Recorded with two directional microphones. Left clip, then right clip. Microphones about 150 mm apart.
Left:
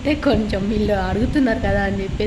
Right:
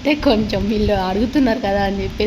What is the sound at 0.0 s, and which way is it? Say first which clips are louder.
A woman's voice: right 3 dB; 15° right (ahead or behind).